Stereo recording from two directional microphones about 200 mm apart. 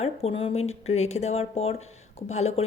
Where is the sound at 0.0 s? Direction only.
30° left (ahead or behind).